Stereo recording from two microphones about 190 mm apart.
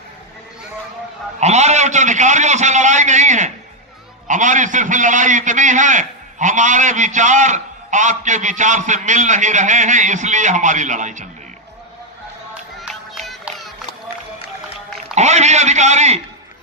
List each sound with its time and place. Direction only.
1.4 s a man's voice: 35° right (ahead or behind)
12.8 s music: centre (ahead or behind)
15.1 s a man's voice: 35° right (ahead or behind)